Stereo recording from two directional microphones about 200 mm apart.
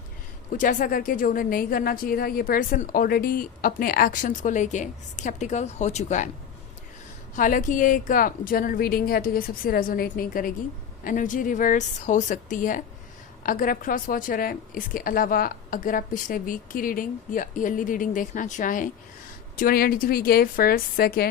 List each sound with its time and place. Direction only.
0.5 s a woman's voice: 40° left (ahead or behind)
7.3 s a woman's voice: 40° left (ahead or behind)